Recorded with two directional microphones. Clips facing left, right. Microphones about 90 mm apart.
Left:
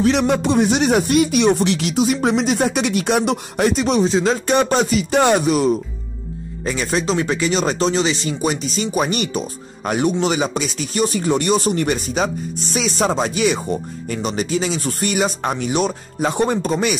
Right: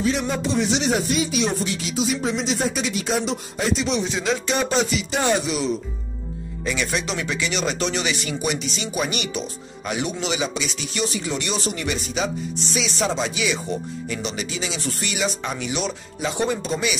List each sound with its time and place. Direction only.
0.0 s speech: 65° left (ahead or behind); by 4.0 s 50° left (ahead or behind)
4.0 s speech: 35° left (ahead or behind)
4.5 s speech: 50° left (ahead or behind)